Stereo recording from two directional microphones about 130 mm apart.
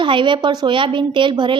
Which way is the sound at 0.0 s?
40° right (ahead or behind).